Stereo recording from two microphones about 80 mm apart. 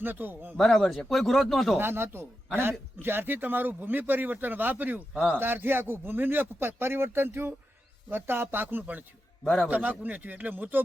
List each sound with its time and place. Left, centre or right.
0.0 s a man's voice: right
0.5 s speech: centre
1.8 s a man's voice: right
9.4 s a man's voice: centre
9.6 s a man's voice: right